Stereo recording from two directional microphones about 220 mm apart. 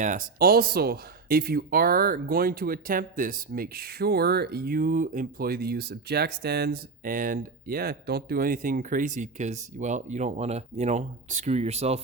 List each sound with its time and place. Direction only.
0.0 s speech: 35° right (ahead or behind)